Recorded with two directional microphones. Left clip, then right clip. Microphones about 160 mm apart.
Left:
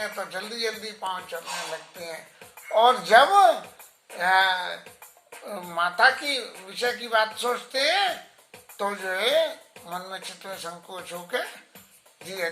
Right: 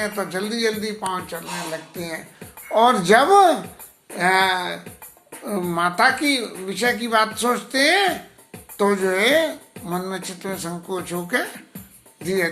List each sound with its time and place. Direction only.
0.0 s speech: 15° right (ahead or behind)